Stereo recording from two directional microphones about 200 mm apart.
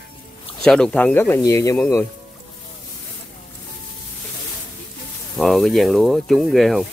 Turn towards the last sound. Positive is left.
turn(degrees=0)  # may be behind; listen again after turning